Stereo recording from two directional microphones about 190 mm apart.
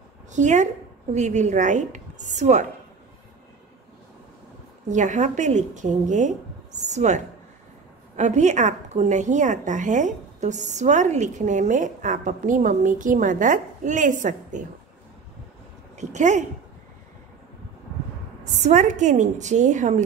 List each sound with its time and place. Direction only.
0.3 s a woman's voice: 40° right (ahead or behind)
4.8 s a woman's voice: 40° right (ahead or behind)
8.2 s a woman's voice: 40° right (ahead or behind)
16.0 s a woman's voice: 40° right (ahead or behind)
18.4 s a woman's voice: 40° right (ahead or behind)